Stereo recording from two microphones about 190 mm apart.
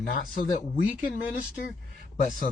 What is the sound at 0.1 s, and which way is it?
Speech, 45° left (ahead or behind).